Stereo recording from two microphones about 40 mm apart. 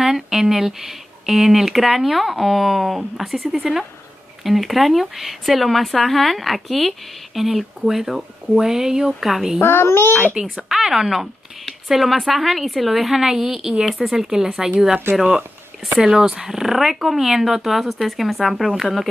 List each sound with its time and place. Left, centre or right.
0.0 s speech: centre
9.6 s a child's voice: left
10.3 s speech: centre
16.0 s speech: centre